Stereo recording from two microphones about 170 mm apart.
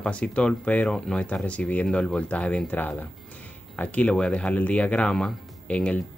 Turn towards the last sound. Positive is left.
turn(degrees=5)  # may be behind; listen again after turning